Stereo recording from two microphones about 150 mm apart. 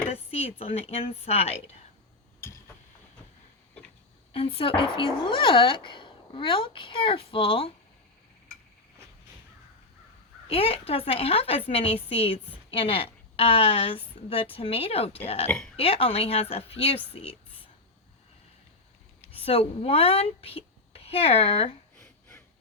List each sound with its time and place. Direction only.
0.1 s a sound: 45° left (ahead or behind)
0.6 s a woman's voice: 40° left (ahead or behind)
4.3 s speech: 40° left (ahead or behind)
10.5 s a woman's voice: 40° left (ahead or behind)
15.4 s speech: 5° left (ahead or behind)
15.7 s a woman's voice: 40° left (ahead or behind)
19.3 s speech: 40° left (ahead or behind)
21.9 s a sound: 15° left (ahead or behind)